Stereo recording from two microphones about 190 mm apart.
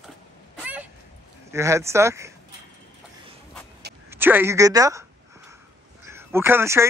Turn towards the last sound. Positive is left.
turn(degrees=-15)  # may be behind; listen again after turning